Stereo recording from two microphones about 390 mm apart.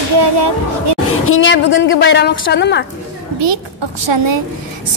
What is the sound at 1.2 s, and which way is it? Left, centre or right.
A woman's voice, left.